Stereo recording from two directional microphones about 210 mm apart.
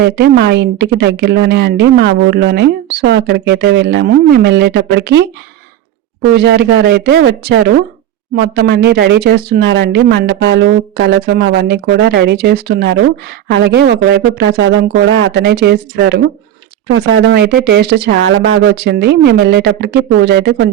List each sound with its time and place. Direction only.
0.0 s speech: 50° right (ahead or behind)
6.2 s speech: 50° right (ahead or behind)